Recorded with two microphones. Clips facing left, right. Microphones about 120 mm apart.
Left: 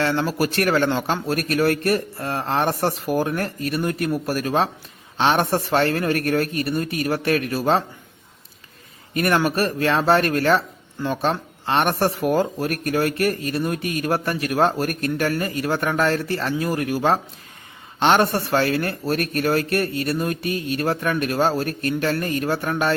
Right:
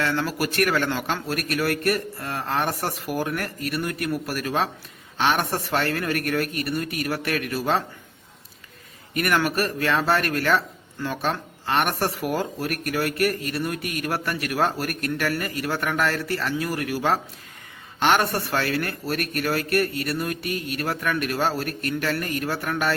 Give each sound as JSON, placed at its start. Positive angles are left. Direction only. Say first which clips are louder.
{"t": 0.0, "sound": "speech", "louder": "left 4 dB", "side_deg": 25}
{"t": 9.1, "sound": "speech", "louder": "left 3 dB", "side_deg": 30}